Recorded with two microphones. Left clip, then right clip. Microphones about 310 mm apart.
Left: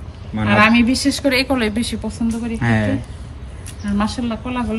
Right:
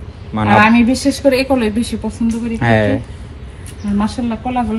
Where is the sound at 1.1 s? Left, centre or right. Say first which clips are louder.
Right 6 dB; centre.